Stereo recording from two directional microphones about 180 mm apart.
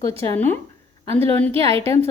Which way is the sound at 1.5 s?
30° right (ahead or behind).